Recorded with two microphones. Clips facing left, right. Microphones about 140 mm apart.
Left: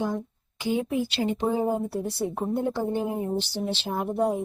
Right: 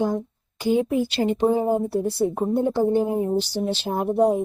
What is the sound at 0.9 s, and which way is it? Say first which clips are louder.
Speech: right 4 dB; 50° right (ahead or behind).